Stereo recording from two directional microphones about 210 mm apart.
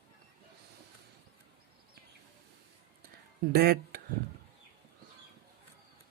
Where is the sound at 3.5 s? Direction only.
45° right (ahead or behind).